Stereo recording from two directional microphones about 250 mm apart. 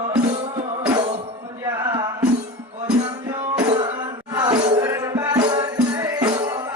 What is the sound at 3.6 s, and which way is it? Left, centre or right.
Music, centre.